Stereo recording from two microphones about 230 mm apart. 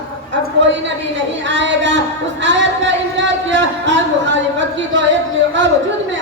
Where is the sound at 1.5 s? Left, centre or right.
Right.